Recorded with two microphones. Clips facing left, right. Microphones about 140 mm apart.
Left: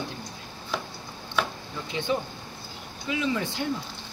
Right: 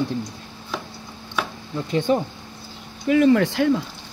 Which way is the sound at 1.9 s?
45° right (ahead or behind).